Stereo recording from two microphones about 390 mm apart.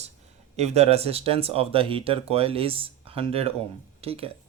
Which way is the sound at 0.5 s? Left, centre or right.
Centre.